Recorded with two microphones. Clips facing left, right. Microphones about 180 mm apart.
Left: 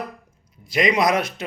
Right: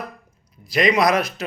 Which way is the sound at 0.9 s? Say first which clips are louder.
Right 1 dB; 25° left (ahead or behind).